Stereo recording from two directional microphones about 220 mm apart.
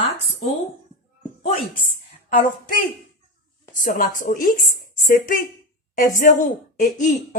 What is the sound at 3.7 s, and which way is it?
A woman's voice, 35° left (ahead or behind).